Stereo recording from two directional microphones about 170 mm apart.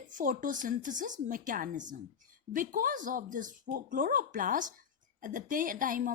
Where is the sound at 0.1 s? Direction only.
50° right (ahead or behind).